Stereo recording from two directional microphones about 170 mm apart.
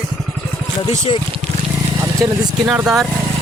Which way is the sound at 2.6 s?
5° right (ahead or behind).